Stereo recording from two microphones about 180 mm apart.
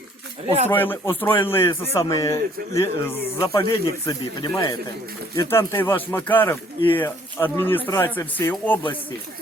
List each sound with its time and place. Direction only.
0.7 s a man's voice: 10° left (ahead or behind)